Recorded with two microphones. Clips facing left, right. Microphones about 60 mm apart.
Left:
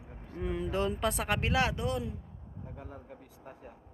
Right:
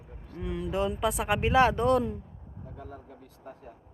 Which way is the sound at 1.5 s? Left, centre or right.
Right.